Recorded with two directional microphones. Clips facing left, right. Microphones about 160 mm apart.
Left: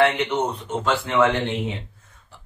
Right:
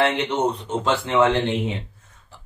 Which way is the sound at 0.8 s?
30° right (ahead or behind).